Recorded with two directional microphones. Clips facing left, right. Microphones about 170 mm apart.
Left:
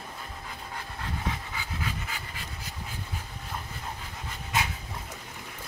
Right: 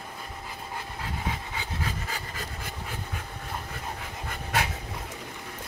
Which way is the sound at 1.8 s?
40° right (ahead or behind).